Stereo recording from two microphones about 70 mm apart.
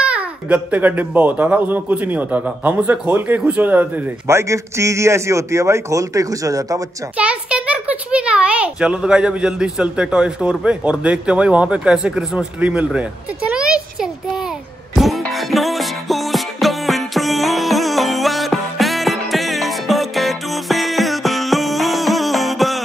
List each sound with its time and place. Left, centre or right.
0.0 s speech: centre
4.3 s a man's voice: right
7.2 s a child's voice: centre
13.5 s a sound: centre
15.0 s music: centre